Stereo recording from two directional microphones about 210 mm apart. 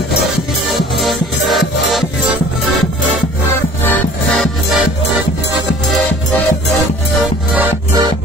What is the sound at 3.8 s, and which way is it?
Music, 10° left (ahead or behind).